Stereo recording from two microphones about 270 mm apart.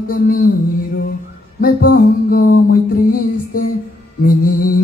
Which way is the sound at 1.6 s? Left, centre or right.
Left.